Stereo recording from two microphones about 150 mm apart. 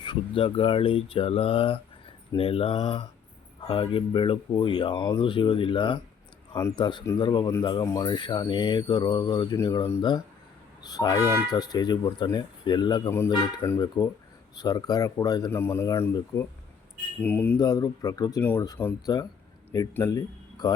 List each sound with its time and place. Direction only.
0.0 s speech: 35° left (ahead or behind)
6.5 s speech: 20° left (ahead or behind)
6.7 s speech: 30° left (ahead or behind)
11.2 s speech: 15° right (ahead or behind)
11.5 s speech: 25° left (ahead or behind)
13.1 s speech: 15° left (ahead or behind)
13.7 s speech: 25° left (ahead or behind)
17.6 s speech: 25° left (ahead or behind)
20.1 s speech: 25° left (ahead or behind)